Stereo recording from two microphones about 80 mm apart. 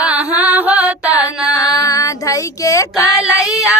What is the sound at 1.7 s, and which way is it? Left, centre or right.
Female singing, left.